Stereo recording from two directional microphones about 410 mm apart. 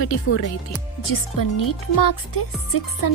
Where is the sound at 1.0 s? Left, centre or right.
Left.